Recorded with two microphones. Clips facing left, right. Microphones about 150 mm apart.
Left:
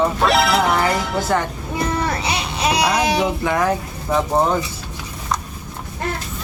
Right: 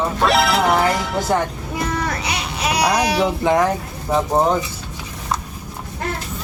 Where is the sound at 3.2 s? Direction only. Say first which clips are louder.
Right 3 dB; 20° right (ahead or behind).